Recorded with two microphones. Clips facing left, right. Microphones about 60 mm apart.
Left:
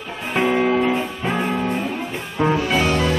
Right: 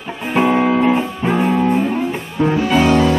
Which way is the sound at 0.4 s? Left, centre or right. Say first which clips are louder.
Right 4 dB; centre.